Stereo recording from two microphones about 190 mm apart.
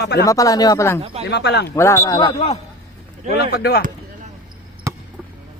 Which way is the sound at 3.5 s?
55° left (ahead or behind).